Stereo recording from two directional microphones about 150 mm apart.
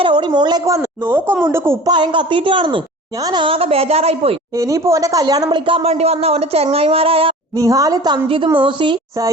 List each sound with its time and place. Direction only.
0.0 s a woman's voice: 30° right (ahead or behind)
1.9 s speech: 30° right (ahead or behind)
4.5 s speech: 20° right (ahead or behind); by 7.3 s 40° right (ahead or behind)
7.5 s a woman's voice: 20° right (ahead or behind)